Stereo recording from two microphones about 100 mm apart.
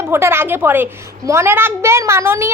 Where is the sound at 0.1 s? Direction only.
25° right (ahead or behind).